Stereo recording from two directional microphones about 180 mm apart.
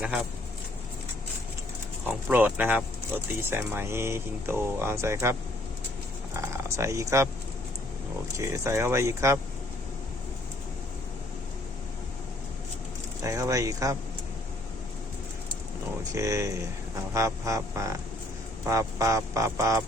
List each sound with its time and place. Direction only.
0.0 s speech: 5° right (ahead or behind)
2.0 s speech: 10° right (ahead or behind)
8.4 s speech: 15° right (ahead or behind)
13.2 s speech: 15° right (ahead or behind)
16.1 s speech: 15° right (ahead or behind)